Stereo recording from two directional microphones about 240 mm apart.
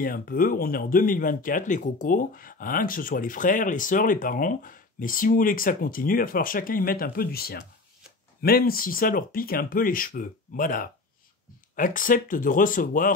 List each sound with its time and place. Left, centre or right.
0.0 s speech: left